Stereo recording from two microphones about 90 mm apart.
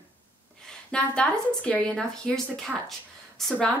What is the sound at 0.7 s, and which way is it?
A woman's voice, 10° left (ahead or behind).